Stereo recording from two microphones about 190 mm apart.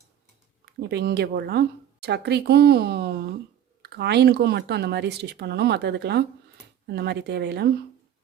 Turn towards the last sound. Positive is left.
turn(degrees=-60)  # may be behind; listen again after turning